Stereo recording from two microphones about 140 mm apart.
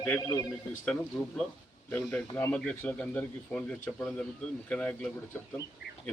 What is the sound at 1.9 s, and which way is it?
Speech, 10° left (ahead or behind).